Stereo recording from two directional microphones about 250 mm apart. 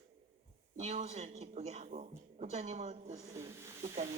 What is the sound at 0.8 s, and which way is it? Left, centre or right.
A man's voice, right.